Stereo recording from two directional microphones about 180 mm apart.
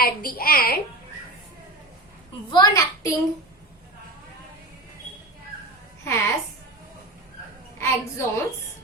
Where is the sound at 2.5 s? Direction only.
20° left (ahead or behind).